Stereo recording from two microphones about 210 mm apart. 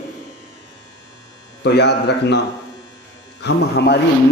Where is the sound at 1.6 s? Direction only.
55° left (ahead or behind).